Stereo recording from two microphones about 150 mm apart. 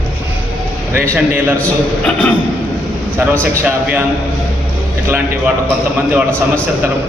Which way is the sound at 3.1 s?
15° right (ahead or behind).